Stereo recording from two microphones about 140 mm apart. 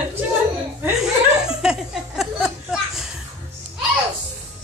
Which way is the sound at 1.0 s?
5° right (ahead or behind).